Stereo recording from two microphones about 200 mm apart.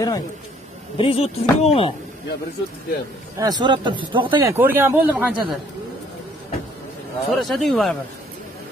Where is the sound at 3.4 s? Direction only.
20° right (ahead or behind).